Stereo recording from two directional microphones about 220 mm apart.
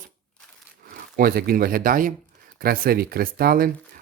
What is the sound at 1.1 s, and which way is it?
Speech, 40° right (ahead or behind).